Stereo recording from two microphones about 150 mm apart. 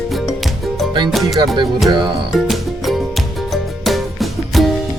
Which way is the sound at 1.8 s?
30° right (ahead or behind).